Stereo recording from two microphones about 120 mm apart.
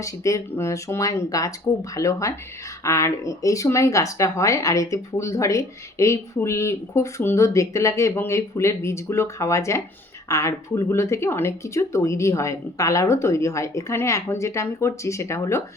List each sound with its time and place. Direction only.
0.0 s speech: 25° left (ahead or behind)